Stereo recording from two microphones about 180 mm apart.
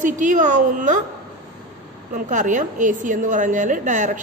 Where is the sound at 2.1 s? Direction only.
45° right (ahead or behind).